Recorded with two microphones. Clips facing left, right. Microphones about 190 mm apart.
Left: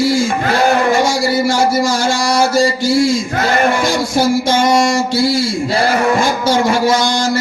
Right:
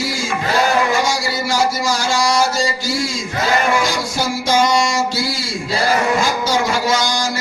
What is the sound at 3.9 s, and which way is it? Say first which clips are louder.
Speech: left 7 dB; 55° left (ahead or behind).